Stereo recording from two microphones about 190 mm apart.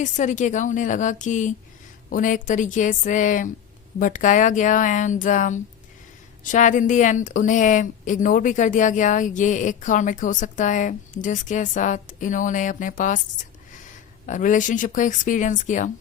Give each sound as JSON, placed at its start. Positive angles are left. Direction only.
{"t": 0.0, "sound": "a woman's voice", "side_deg": 40}